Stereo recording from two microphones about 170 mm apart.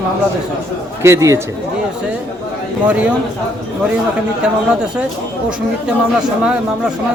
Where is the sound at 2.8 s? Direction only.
5° right (ahead or behind).